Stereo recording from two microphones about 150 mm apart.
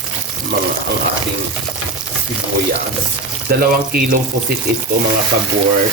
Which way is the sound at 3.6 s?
75° right (ahead or behind).